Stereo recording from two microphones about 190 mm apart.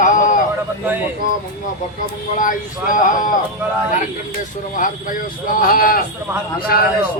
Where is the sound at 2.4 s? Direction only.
45° left (ahead or behind).